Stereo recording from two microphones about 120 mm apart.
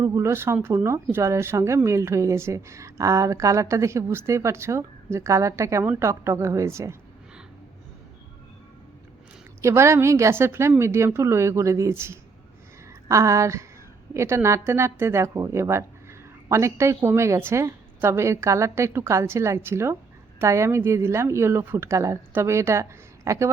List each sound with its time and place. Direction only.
0.0 s speech: 25° right (ahead or behind)
9.6 s speech: 25° right (ahead or behind)